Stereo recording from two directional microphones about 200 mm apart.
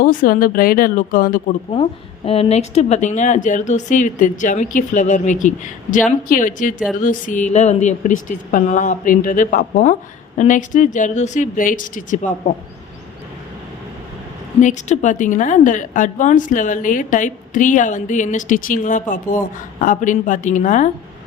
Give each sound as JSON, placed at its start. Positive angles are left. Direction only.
{"t": 0.0, "sound": "speech", "side_deg": 45}
{"t": 1.7, "sound": "a woman's voice", "side_deg": 30}
{"t": 14.6, "sound": "a woman's voice", "side_deg": 35}